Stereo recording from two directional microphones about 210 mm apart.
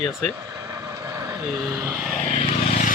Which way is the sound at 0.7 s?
15° right (ahead or behind).